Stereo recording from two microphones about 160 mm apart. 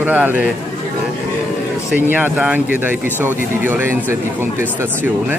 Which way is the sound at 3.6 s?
15° right (ahead or behind).